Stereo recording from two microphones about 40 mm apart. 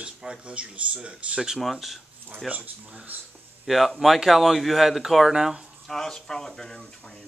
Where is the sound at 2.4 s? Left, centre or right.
Right.